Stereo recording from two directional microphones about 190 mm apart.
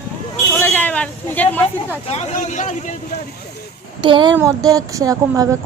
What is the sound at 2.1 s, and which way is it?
Speech, 35° left (ahead or behind).